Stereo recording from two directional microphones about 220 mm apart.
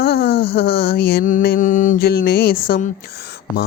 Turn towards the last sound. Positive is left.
turn(degrees=45)  # may be behind; listen again after turning